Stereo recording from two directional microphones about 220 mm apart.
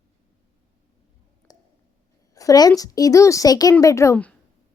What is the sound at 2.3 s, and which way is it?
A child's voice, 15° left (ahead or behind).